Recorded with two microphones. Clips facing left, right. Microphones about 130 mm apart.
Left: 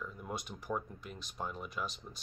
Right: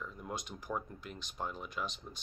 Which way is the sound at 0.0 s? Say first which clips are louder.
Even; 5° left (ahead or behind).